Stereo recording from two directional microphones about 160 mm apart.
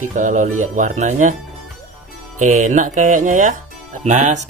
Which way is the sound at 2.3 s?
50° right (ahead or behind).